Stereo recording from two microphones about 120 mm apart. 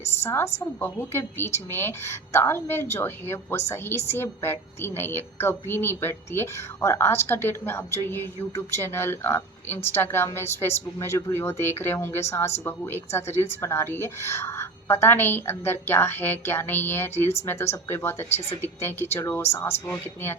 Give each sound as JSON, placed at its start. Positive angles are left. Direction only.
{"t": 0.2, "sound": "a woman's voice", "side_deg": 20}